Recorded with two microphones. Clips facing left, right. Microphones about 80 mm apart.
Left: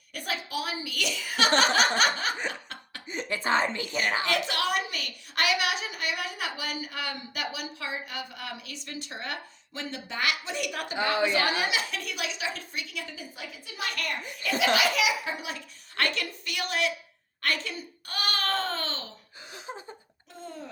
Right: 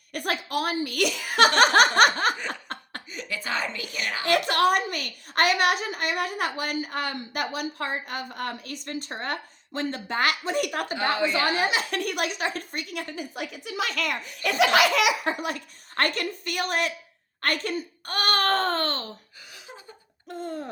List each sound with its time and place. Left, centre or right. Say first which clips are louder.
0.1 s a woman's voice: right 5 dB; right
2.5 s laughter: right 4 dB; right
3.1 s speech: left 5 dB; left
4.3 s a woman's voice: right 6 dB; right
11.3 s a woman's voice: right 3 dB; right
11.9 s a woman's voice: right 7 dB; right
14.6 s a woman's voice: right 5 dB; right
17.4 s babbling: right 4 dB; right
19.5 s a sound: left 6 dB; left
20.4 s a sound: right 7 dB; right